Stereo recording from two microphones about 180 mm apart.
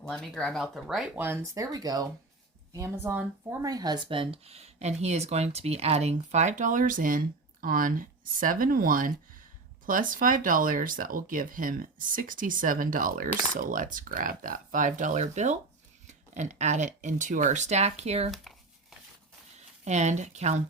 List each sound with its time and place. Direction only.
0.0 s speech: 5° left (ahead or behind)
1.5 s speech: 20° right (ahead or behind); by 18.3 s 35° right (ahead or behind)
18.3 s a sound: centre (ahead or behind)
19.8 s speech: 40° right (ahead or behind)